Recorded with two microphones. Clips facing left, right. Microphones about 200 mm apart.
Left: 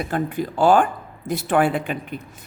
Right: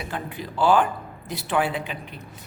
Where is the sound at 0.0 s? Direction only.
45° left (ahead or behind).